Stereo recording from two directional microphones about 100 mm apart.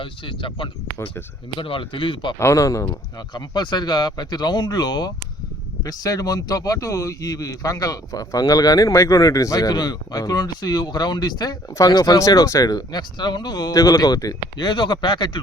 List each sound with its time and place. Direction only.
0.0 s speech: 60° left (ahead or behind)
2.4 s speech: 30° left (ahead or behind)
3.3 s a man's voice: 45° left (ahead or behind)
14.7 s speech: 55° left (ahead or behind)